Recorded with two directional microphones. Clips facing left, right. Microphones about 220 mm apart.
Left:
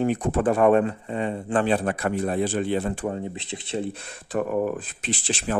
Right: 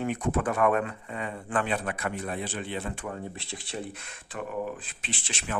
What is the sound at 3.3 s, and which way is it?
Speech, 20° left (ahead or behind).